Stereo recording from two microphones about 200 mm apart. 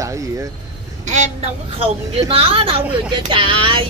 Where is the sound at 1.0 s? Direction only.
35° right (ahead or behind).